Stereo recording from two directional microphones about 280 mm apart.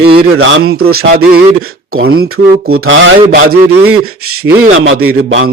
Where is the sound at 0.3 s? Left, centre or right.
Right.